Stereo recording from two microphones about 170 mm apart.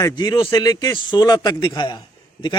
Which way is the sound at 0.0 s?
25° left (ahead or behind).